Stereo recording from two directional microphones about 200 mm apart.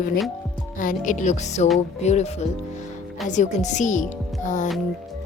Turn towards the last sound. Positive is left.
turn(degrees=40)  # may be behind; listen again after turning